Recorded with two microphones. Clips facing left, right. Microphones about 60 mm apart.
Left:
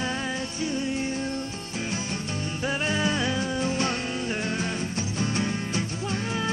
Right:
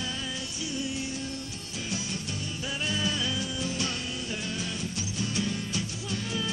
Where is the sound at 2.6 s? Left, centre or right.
Left.